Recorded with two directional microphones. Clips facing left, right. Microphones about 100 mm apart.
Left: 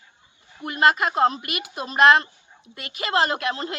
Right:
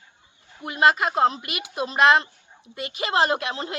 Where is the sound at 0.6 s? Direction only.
15° right (ahead or behind).